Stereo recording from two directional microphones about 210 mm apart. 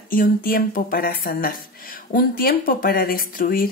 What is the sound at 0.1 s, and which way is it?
Speech, 45° left (ahead or behind).